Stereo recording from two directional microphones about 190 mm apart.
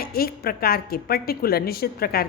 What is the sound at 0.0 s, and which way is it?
A woman's voice, 55° left (ahead or behind).